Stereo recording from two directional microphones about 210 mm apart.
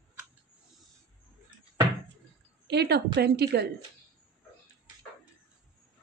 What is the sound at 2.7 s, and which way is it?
A woman's voice, 50° right (ahead or behind).